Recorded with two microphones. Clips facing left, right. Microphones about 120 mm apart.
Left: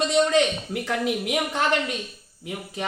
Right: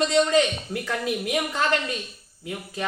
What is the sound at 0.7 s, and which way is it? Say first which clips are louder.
Speech: left 2 dB; 20° left (ahead or behind).